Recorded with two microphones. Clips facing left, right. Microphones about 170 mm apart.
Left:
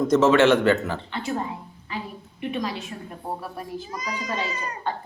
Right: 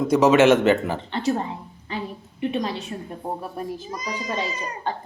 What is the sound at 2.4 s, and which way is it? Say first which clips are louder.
Speech: right 3 dB; 30° right (ahead or behind).